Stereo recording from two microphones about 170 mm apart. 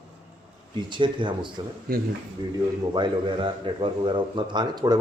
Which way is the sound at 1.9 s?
60° right (ahead or behind).